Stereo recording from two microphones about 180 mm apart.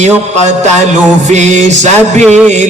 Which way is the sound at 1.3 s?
40° right (ahead or behind).